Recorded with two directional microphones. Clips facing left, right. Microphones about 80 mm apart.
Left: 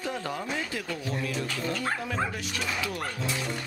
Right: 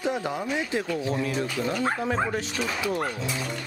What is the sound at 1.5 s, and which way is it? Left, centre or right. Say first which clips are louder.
Speech: right 4 dB; centre.